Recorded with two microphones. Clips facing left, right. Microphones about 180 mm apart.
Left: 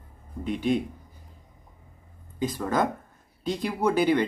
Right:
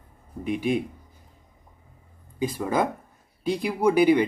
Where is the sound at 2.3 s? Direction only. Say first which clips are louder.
Right 1 dB; 10° right (ahead or behind).